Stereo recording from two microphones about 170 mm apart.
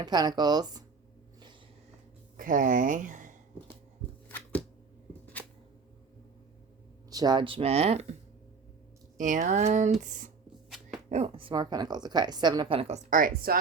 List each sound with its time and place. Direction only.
0.0 s a woman's voice: 25° right (ahead or behind)
2.4 s speech: 50° right (ahead or behind)
5.2 s a sound: 10° left (ahead or behind)
7.1 s speech: 25° right (ahead or behind); by 8.1 s 40° right (ahead or behind)
9.1 s a sound: 50° right (ahead or behind)
11.1 s a woman's voice: 35° right (ahead or behind)
13.1 s speech: 55° right (ahead or behind)